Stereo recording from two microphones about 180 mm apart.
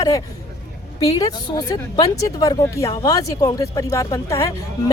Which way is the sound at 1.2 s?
20° left (ahead or behind).